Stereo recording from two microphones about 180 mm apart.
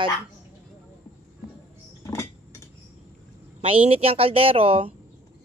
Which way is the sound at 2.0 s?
15° left (ahead or behind).